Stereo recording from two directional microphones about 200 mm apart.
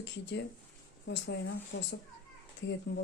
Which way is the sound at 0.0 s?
60° left (ahead or behind).